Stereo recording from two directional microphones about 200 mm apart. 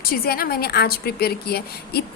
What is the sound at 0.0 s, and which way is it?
A woman's voice, 50° left (ahead or behind).